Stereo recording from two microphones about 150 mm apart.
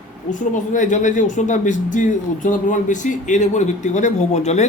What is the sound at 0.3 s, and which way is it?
Speech, 60° left (ahead or behind).